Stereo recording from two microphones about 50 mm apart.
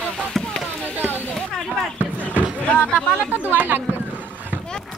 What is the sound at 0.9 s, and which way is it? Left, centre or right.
Speech, right.